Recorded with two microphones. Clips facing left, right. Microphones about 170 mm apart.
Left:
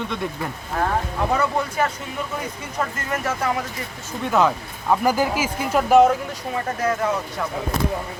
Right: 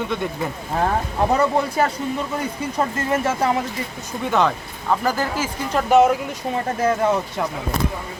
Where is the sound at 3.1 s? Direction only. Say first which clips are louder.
Right 4 dB; 25° right (ahead or behind).